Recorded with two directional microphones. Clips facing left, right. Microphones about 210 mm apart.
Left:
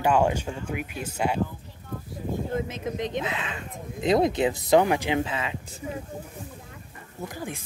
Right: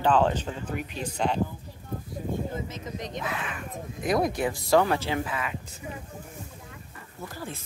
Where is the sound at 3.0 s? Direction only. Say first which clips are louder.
Left 3 dB; 20° left (ahead or behind).